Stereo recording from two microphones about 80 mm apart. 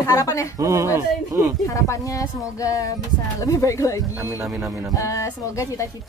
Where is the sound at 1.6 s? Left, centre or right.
Left.